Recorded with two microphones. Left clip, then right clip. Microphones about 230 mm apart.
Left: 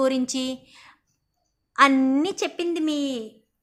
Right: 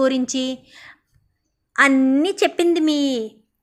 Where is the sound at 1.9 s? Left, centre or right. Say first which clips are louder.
Right 5 dB; centre.